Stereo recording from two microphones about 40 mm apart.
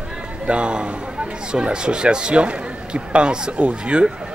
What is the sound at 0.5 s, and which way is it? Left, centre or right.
A man's voice, right.